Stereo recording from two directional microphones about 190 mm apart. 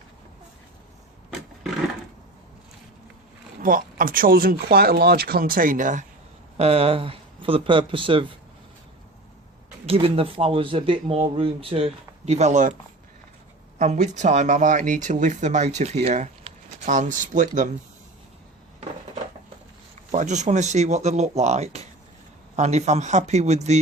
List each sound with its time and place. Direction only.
3.6 s speech: 45° right (ahead or behind)
6.6 s speech: 30° right (ahead or behind)
9.8 s speech: 30° right (ahead or behind)
13.7 s speech: 40° right (ahead or behind)
20.1 s speech: 40° right (ahead or behind)